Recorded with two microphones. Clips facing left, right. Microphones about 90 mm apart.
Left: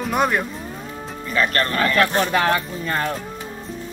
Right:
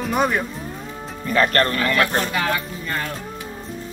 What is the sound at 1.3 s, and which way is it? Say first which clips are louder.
Speech: right 3 dB; 40° right (ahead or behind).